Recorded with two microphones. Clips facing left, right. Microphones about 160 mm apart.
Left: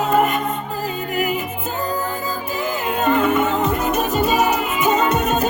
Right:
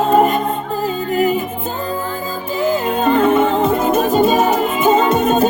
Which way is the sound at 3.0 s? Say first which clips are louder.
Right 3 dB; 30° right (ahead or behind).